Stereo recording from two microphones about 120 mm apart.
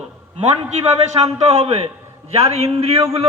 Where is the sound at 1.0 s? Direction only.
60° right (ahead or behind).